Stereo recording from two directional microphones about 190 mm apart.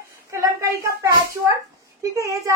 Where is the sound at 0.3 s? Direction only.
15° right (ahead or behind).